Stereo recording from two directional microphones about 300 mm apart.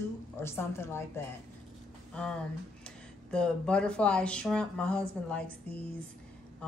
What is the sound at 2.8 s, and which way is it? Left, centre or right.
Speech, centre.